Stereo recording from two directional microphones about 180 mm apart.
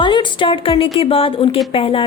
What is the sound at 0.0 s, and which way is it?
A woman's voice, 25° left (ahead or behind).